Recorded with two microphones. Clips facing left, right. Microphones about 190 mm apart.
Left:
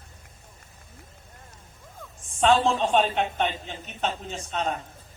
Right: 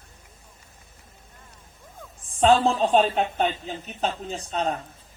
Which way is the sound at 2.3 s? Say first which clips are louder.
Right 2 dB; 35° right (ahead or behind).